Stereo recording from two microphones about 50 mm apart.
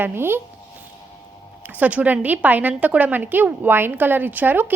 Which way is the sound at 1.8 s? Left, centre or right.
Right.